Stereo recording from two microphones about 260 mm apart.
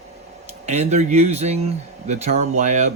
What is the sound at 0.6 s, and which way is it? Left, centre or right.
Speech, right.